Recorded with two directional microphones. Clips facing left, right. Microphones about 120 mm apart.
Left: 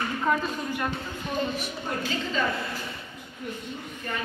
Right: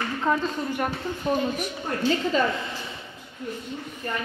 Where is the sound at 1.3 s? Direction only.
35° right (ahead or behind).